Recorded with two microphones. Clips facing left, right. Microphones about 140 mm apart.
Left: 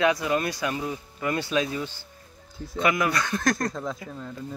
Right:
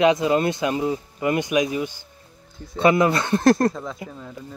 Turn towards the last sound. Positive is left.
turn(degrees=-5)  # may be behind; listen again after turning